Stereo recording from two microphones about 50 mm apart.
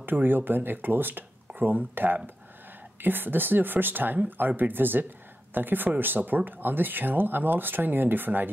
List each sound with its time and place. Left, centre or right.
0.0 s speech: right